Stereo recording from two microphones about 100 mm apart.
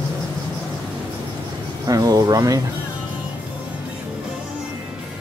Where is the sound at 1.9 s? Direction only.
35° right (ahead or behind).